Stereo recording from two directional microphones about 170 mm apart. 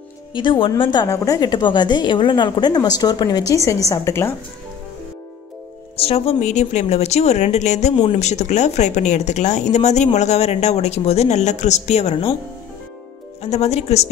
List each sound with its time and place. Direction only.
0.3 s a woman's voice: 30° left (ahead or behind)
5.9 s speech: 35° left (ahead or behind)
13.4 s speech: 40° left (ahead or behind)